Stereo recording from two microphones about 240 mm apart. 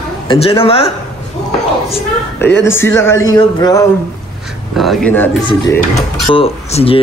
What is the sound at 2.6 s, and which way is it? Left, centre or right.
A man's voice, centre.